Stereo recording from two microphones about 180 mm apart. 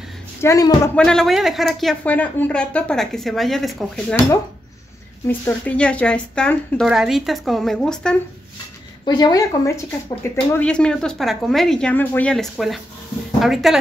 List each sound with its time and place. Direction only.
0.4 s a woman's voice: 20° left (ahead or behind)
0.9 s speech: 5° left (ahead or behind)
5.4 s speech: 5° left (ahead or behind)
9.0 s a woman's voice: 25° left (ahead or behind)
10.5 s speech: 5° left (ahead or behind)